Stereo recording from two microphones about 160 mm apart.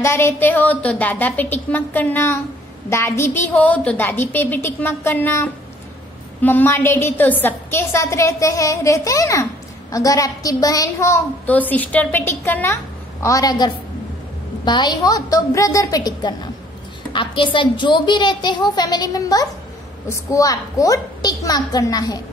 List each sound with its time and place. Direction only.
0.0 s a woman's voice: 15° left (ahead or behind)